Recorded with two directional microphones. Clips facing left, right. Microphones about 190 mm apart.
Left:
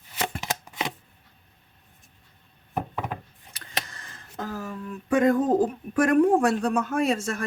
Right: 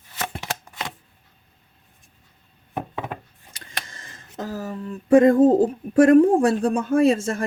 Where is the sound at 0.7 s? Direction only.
15° left (ahead or behind).